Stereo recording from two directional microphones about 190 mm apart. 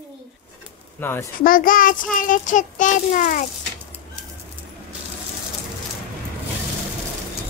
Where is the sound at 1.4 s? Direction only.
45° left (ahead or behind).